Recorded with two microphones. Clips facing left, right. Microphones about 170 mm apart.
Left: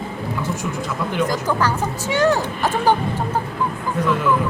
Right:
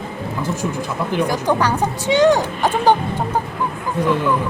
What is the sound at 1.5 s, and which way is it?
Speech, 15° right (ahead or behind).